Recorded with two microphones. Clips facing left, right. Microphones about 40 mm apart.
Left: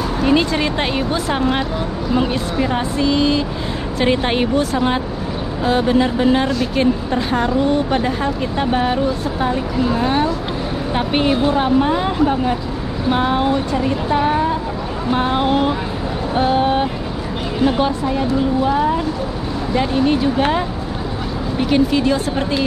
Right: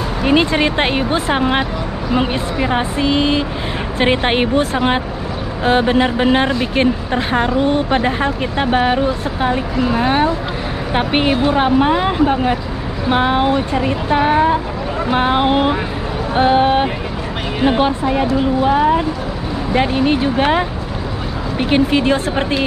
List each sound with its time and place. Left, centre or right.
0.2 s speech: right